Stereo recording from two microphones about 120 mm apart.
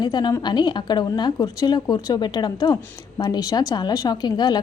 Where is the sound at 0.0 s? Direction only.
35° left (ahead or behind).